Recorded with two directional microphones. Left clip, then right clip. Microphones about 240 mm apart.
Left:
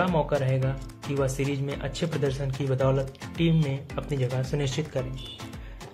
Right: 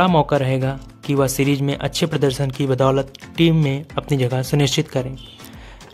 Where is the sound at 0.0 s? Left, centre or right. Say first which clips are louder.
Right 9 dB; right.